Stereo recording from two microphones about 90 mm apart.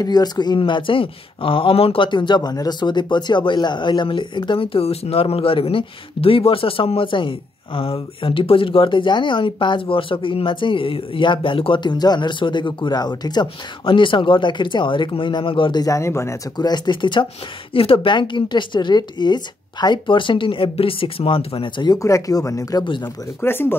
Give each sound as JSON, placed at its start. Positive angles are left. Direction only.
{"t": 0.0, "sound": "speech", "side_deg": 50}
{"t": 13.8, "sound": "a woman's voice", "side_deg": 65}
{"t": 15.8, "sound": "speech", "side_deg": 35}
{"t": 16.5, "sound": "a woman's voice", "side_deg": 55}
{"t": 17.7, "sound": "a woman's voice", "side_deg": 90}
{"t": 21.8, "sound": "speech", "side_deg": 35}
{"t": 23.4, "sound": "speech", "side_deg": 25}